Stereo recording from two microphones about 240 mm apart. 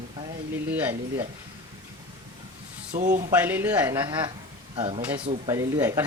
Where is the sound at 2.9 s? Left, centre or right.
Right.